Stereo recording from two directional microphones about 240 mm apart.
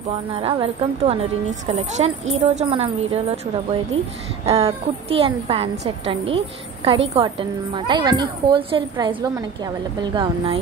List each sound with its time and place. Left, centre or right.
0.3 s a woman's voice: right